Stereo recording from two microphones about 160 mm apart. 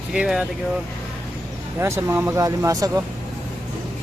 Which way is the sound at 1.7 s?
15° right (ahead or behind).